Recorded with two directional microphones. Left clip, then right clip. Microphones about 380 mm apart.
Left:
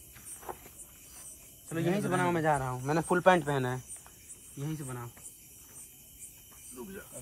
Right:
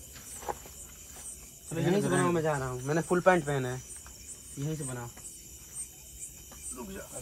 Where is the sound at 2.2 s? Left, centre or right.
Left.